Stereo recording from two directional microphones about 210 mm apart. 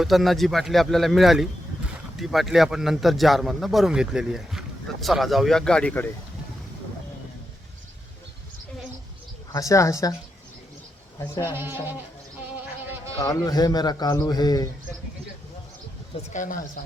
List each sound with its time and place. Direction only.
0.0 s speech: centre (ahead or behind)
9.5 s a man's voice: 15° left (ahead or behind)
11.2 s a man's voice: 15° left (ahead or behind)
11.5 s speech: 10° right (ahead or behind)
13.1 s a man's voice: 15° left (ahead or behind)
16.1 s speech: 35° left (ahead or behind)